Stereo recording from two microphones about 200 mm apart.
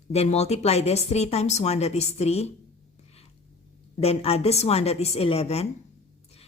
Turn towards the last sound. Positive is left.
turn(degrees=30)  # may be behind; listen again after turning